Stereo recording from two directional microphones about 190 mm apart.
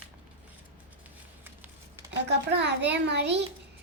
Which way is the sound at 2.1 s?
65° right (ahead or behind).